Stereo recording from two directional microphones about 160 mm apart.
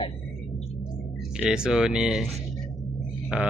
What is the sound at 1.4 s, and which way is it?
Speech, 5° right (ahead or behind).